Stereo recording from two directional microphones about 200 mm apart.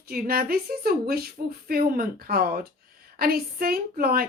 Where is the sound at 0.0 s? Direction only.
50° right (ahead or behind).